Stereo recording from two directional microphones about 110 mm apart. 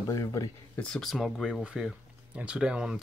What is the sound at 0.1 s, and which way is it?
Speech, 35° left (ahead or behind).